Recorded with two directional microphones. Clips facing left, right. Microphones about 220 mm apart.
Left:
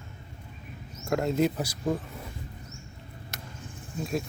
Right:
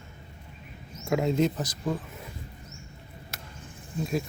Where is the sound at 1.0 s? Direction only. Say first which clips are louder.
Right 1 dB; centre (ahead or behind).